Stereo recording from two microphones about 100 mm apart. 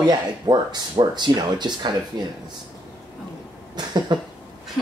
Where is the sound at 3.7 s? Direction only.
45° right (ahead or behind).